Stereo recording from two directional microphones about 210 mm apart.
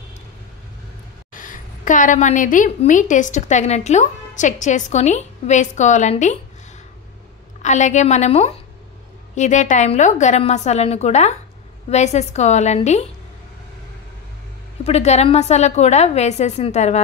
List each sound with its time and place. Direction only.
1.3 s a woman's voice: 40° left (ahead or behind)
7.6 s a woman's voice: 35° left (ahead or behind)
14.9 s a woman's voice: 30° left (ahead or behind)